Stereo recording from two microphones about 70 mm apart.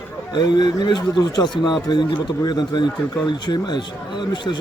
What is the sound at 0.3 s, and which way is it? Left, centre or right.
Speech, left.